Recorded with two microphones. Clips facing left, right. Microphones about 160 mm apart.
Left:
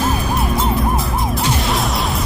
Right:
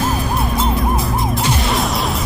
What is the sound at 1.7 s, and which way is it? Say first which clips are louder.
Music: right 1 dB; centre (ahead or behind).